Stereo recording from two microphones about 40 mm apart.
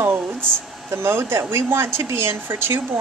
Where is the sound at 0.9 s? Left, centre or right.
Right.